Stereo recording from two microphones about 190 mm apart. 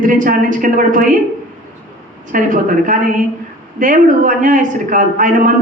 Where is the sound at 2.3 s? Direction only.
45° right (ahead or behind).